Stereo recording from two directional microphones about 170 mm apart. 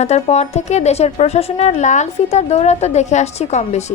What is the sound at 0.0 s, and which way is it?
A woman's voice, 40° left (ahead or behind).